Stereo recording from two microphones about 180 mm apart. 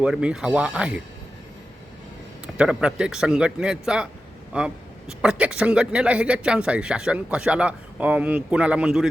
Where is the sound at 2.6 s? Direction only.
5° right (ahead or behind).